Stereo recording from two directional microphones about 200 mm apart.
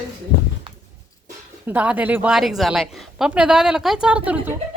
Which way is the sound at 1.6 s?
5° right (ahead or behind).